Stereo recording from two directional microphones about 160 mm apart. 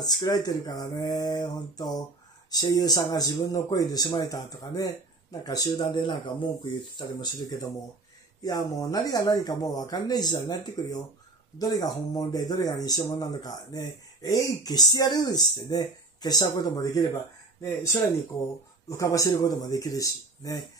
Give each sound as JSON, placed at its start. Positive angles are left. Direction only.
{"t": 0.0, "sound": "speech", "side_deg": 25}
{"t": 18.9, "sound": "speech", "side_deg": 20}